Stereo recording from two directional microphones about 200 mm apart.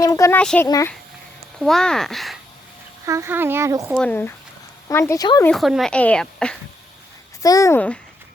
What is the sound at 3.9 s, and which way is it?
Speech, 5° left (ahead or behind).